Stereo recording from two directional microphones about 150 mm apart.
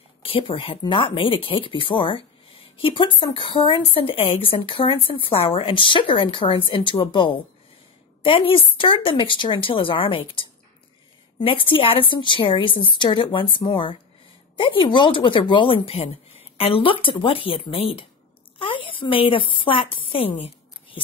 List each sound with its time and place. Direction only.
0.2 s a woman's voice: 35° left (ahead or behind)